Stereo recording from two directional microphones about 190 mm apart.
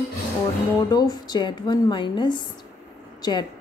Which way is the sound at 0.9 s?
20° left (ahead or behind).